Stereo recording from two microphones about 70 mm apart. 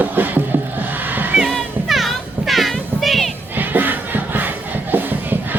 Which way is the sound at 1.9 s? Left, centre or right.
Centre.